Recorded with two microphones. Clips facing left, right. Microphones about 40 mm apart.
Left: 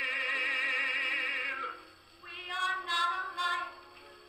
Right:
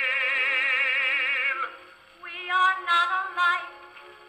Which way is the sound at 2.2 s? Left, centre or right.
Right.